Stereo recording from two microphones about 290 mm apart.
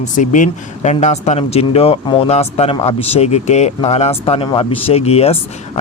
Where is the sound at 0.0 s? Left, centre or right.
Left.